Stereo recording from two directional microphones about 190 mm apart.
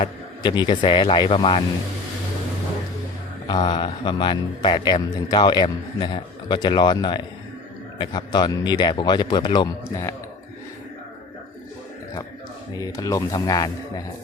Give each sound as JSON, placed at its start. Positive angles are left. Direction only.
{"t": 0.0, "sound": "a man's voice", "side_deg": 25}
{"t": 3.4, "sound": "a man's voice", "side_deg": 25}
{"t": 12.8, "sound": "a man's voice", "side_deg": 15}